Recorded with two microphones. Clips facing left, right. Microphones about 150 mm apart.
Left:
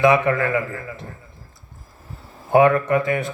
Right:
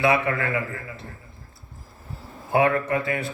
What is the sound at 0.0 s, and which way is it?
A man's voice, 40° left (ahead or behind).